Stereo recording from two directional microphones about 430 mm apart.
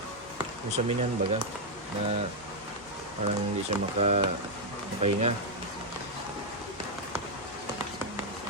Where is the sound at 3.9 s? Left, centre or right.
Centre.